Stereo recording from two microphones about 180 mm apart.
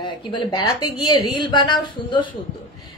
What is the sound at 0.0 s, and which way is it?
A woman's voice, 25° left (ahead or behind).